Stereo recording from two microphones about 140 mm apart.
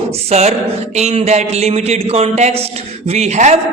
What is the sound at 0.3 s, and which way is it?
A woman's voice, 50° right (ahead or behind).